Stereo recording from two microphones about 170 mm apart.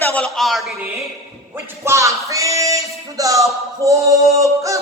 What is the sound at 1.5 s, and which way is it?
Music, 15° right (ahead or behind).